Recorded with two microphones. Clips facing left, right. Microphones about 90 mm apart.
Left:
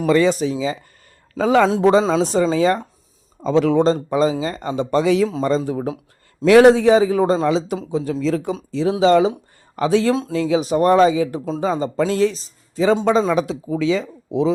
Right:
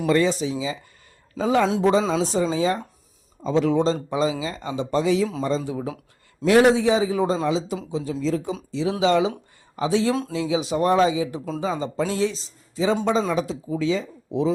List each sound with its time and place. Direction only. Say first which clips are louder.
0.2 s speech: left 5 dB; 55° left (ahead or behind)
1.4 s a man's voice: left 5 dB; 90° left
1.8 s speech: left 5 dB; 65° left (ahead or behind)
3.4 s speech: left 5 dB; 80° left; by 5.9 s 45° left (ahead or behind)
6.4 s speech: left 6 dB; 70° left (ahead or behind)
7.9 s speech: left 5 dB; 50° left (ahead or behind)
8.2 s speech: left 2 dB; 70° left (ahead or behind)
8.9 s speech: left 6 dB; 40° left (ahead or behind)
9.7 s speech: left 4 dB; 60° left (ahead or behind)
13.3 s speech: left 5 dB; 75° left (ahead or behind); by 14.5 s 90° left